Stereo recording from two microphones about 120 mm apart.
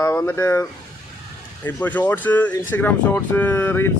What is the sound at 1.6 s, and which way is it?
Speech, 15° left (ahead or behind).